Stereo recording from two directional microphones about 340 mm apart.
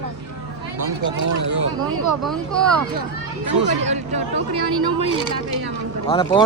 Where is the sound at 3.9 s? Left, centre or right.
Right.